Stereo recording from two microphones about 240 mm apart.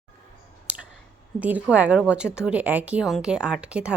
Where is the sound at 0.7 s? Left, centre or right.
Centre.